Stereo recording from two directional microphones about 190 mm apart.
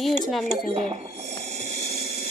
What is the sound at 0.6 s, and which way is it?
Speech, 35° right (ahead or behind).